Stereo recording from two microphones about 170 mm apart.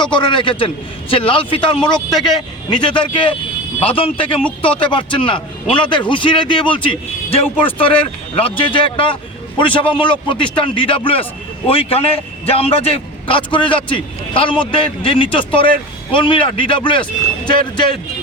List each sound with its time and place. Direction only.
0.0 s a man's voice: 25° left (ahead or behind)